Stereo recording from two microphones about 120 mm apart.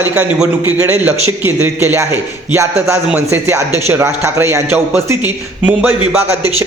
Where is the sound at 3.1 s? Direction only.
20° right (ahead or behind).